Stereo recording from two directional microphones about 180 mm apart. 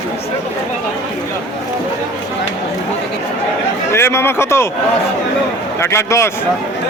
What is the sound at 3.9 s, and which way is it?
Speech, 15° left (ahead or behind).